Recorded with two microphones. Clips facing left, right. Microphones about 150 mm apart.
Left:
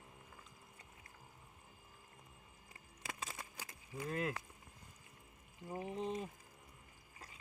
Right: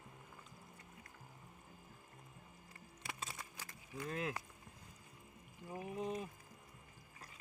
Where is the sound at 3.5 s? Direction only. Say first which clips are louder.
Left 1 dB; 15° left (ahead or behind).